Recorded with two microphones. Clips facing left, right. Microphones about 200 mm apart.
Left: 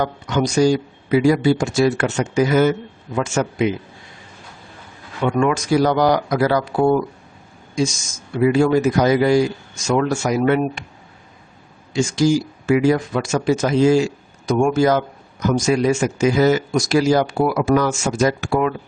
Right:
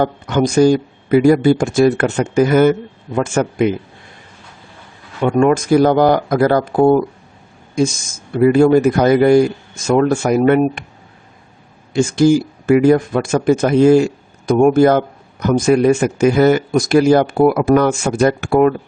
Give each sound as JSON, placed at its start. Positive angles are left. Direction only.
{"t": 0.0, "sound": "speech", "side_deg": -55}
{"t": 5.2, "sound": "speech", "side_deg": -45}
{"t": 11.9, "sound": "speech", "side_deg": -55}